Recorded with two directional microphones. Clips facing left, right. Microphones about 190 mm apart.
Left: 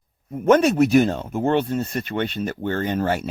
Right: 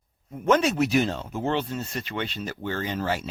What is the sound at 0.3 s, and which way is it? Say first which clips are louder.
Speech: left 6 dB; 55° left (ahead or behind).